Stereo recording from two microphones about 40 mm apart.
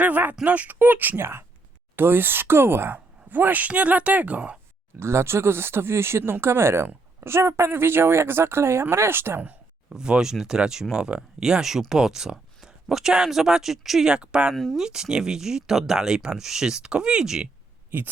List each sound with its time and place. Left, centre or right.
0.0 s speech: right
1.1 s speech: right
2.0 s speech: right
2.9 s speech: right
4.9 s speech: right
9.9 s speech: centre
14.1 s speech: right
14.5 s speech: centre
14.8 s speech: centre
17.9 s speech: right